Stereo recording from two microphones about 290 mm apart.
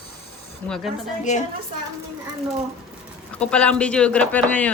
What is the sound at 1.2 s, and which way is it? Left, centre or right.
Speech, left.